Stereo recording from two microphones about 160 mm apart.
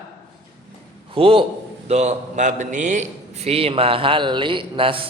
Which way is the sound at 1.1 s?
35° right (ahead or behind).